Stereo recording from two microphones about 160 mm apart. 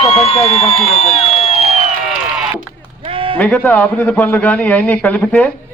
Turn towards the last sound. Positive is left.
turn(degrees=10)  # may be behind; listen again after turning